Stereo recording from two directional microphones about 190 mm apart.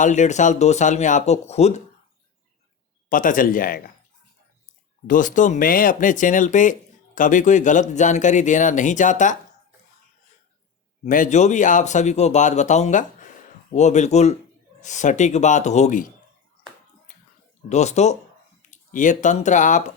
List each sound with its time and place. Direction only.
0.0 s speech: 40° left (ahead or behind)
3.1 s speech: 45° left (ahead or behind)
5.0 s speech: 45° left (ahead or behind)
11.0 s speech: 40° left (ahead or behind)
17.7 s speech: 35° left (ahead or behind)